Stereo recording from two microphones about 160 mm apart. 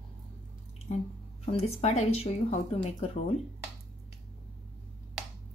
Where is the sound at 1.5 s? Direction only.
40° left (ahead or behind).